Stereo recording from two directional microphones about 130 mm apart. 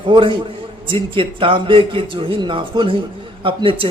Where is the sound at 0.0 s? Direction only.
40° right (ahead or behind).